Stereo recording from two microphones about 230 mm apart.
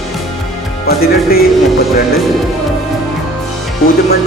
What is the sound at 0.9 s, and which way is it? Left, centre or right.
Speech, left.